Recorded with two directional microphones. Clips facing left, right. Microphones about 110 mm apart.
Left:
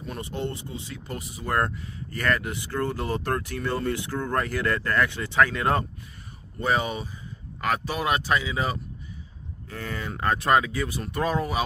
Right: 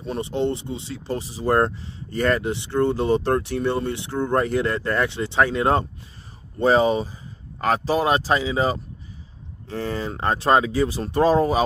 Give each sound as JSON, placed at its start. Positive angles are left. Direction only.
{"t": 0.0, "sound": "speech", "side_deg": -25}